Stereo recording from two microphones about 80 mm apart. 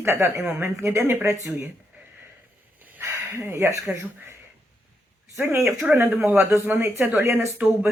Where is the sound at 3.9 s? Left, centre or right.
Right.